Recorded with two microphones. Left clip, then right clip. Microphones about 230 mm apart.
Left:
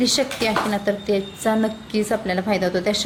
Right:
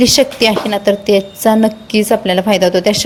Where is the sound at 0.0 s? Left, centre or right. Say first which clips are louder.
Right 10 dB; right.